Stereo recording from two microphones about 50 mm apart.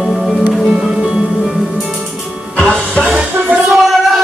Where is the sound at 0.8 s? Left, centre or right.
Centre.